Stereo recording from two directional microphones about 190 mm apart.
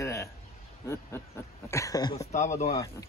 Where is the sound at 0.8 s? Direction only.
15° left (ahead or behind).